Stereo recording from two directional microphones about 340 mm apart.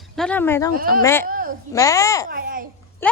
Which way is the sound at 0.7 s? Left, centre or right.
Right.